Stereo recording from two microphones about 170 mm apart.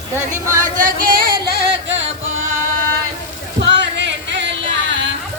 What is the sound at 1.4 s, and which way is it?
Singing, 70° right (ahead or behind).